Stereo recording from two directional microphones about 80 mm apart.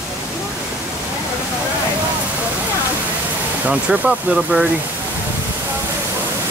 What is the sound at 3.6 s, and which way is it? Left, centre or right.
Speech, centre.